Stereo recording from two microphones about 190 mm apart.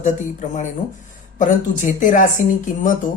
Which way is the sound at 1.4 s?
40° left (ahead or behind).